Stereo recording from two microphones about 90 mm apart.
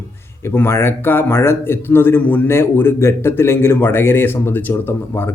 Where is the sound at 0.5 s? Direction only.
25° left (ahead or behind).